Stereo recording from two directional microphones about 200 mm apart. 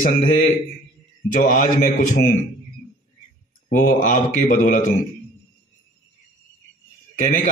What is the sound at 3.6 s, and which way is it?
Speech, 40° left (ahead or behind).